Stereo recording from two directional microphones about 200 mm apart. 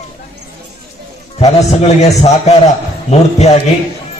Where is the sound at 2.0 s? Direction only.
35° left (ahead or behind).